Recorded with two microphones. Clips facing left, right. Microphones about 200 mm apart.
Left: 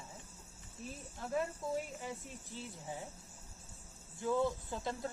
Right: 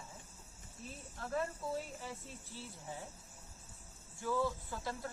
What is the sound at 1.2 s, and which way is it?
Speech, 15° left (ahead or behind).